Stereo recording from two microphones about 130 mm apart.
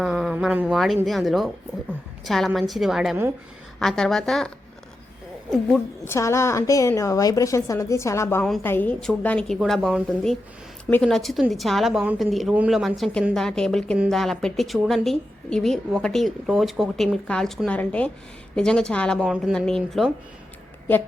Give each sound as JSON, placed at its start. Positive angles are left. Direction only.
{"t": 0.0, "sound": "a sound", "side_deg": -5}
{"t": 0.7, "sound": "a woman's voice", "side_deg": 0}
{"t": 6.1, "sound": "a woman's voice", "side_deg": 20}